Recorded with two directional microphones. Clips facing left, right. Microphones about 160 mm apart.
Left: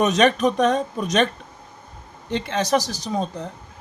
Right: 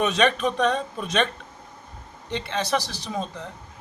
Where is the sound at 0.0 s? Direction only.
40° left (ahead or behind).